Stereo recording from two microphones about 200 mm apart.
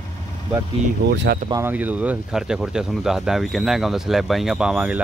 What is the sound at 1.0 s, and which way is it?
Speech, 55° right (ahead or behind).